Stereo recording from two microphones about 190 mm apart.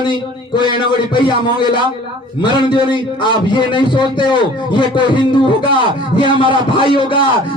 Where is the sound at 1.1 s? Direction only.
25° left (ahead or behind).